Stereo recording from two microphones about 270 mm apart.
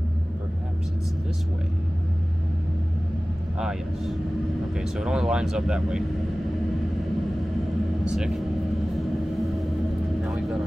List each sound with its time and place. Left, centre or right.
3.5 s speech: centre
8.0 s speech: centre
10.2 s speech: centre